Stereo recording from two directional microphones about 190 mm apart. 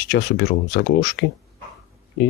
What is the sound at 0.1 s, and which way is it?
Speech, 70° left (ahead or behind).